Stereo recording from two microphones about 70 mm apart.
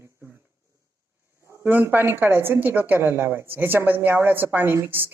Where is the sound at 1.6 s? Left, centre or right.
Right.